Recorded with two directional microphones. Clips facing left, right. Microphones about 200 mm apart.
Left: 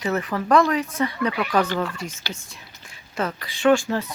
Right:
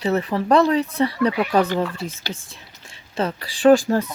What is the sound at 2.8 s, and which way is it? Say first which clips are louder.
Speech: right 3 dB; 30° right (ahead or behind).